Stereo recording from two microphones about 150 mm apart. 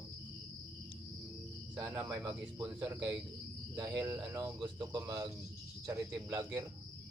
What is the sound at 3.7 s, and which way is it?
Speech, 20° right (ahead or behind).